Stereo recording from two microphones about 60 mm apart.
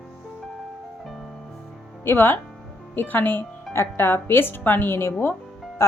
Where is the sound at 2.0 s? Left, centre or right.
Left.